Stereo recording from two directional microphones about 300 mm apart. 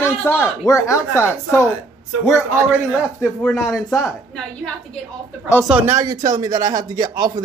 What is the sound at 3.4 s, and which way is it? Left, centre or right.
A woman's voice, centre.